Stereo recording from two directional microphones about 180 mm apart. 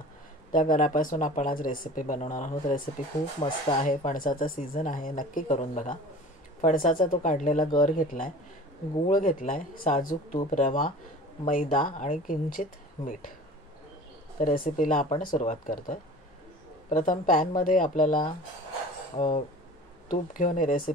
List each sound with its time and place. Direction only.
0.5 s speech: 50° left (ahead or behind)
3.4 s speech: 30° left (ahead or behind)
3.8 s speech: 45° left (ahead or behind)
14.4 s speech: 50° left (ahead or behind)